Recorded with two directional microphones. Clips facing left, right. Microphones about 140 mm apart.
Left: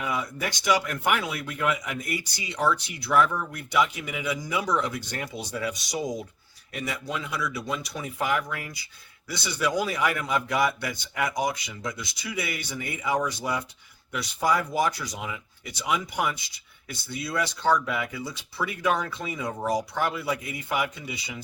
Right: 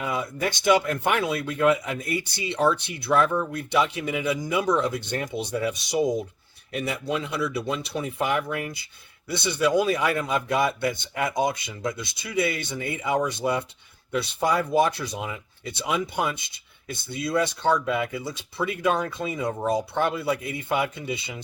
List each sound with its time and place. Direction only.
0.0 s a man's voice: 25° right (ahead or behind)